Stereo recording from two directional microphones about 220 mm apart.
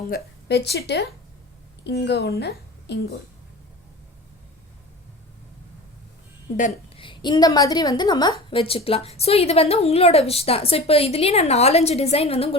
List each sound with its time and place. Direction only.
0.1 s a woman's voice: 50° left (ahead or behind)
6.6 s a woman's voice: 30° left (ahead or behind)